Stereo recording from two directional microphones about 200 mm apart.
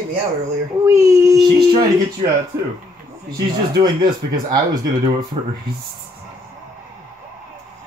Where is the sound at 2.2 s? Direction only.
30° right (ahead or behind).